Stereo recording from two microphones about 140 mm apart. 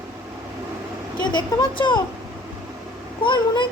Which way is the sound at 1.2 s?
35° left (ahead or behind).